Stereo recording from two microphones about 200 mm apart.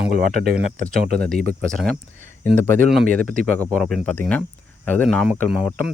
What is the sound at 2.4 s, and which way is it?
Speech, 40° right (ahead or behind).